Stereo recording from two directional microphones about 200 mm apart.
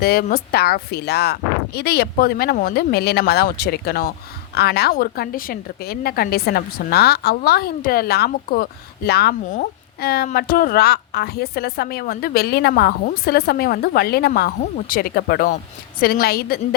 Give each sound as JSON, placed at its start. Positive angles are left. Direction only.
{"t": 0.0, "sound": "a woman's voice", "side_deg": 50}